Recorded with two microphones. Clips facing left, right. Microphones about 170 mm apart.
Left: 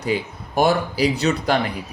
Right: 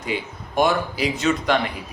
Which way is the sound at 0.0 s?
40° left (ahead or behind).